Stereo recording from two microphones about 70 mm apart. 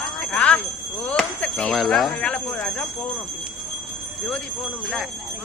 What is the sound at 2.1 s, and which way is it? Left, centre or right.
Speech, centre.